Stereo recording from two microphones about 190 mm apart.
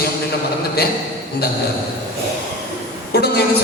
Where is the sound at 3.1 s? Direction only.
60° left (ahead or behind).